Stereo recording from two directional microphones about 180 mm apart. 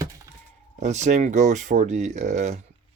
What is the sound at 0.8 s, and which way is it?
Speech, 40° right (ahead or behind).